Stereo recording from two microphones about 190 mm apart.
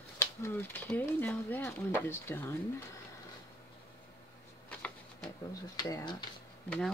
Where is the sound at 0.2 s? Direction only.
10° left (ahead or behind).